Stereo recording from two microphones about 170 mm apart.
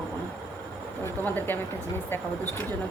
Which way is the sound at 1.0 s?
10° left (ahead or behind).